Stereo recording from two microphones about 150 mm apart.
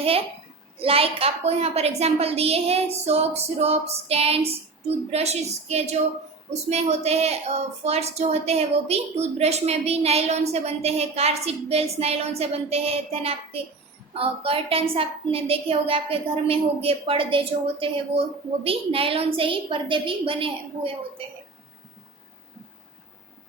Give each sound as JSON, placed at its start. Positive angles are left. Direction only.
{"t": 0.8, "sound": "a woman's voice", "side_deg": -40}